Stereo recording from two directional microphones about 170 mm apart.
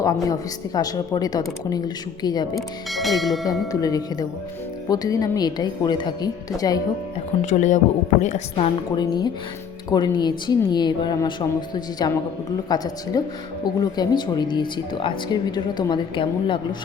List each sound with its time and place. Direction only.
0.0 s speech: 20° left (ahead or behind)
2.6 s speech: centre (ahead or behind)
3.7 s speech: 20° left (ahead or behind)
7.4 s a woman's voice: 45° left (ahead or behind); by 16.6 s 30° left (ahead or behind)